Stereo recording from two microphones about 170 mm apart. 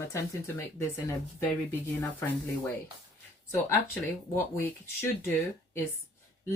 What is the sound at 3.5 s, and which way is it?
Speech, 15° left (ahead or behind).